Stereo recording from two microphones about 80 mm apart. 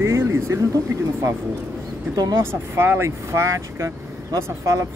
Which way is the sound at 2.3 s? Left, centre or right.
Right.